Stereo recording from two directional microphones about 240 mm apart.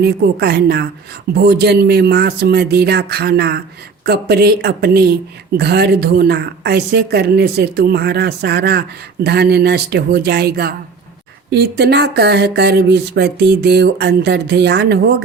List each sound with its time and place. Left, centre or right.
0.0 s speech: right